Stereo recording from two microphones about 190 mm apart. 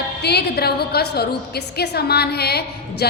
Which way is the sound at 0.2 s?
60° left (ahead or behind).